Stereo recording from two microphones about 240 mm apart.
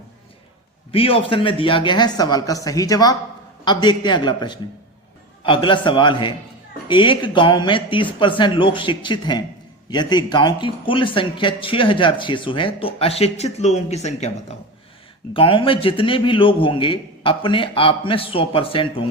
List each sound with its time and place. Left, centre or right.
0.9 s a man's voice: left